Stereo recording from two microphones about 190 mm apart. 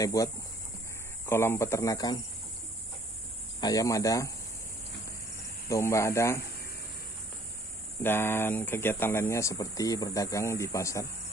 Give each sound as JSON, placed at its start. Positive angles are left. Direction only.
{"t": 0.0, "sound": "speech", "side_deg": 15}
{"t": 3.6, "sound": "speech", "side_deg": 20}
{"t": 5.7, "sound": "speech", "side_deg": 15}
{"t": 8.0, "sound": "speech", "side_deg": 10}